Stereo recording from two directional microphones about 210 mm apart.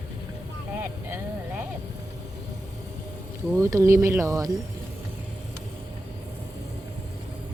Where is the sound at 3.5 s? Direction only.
15° right (ahead or behind).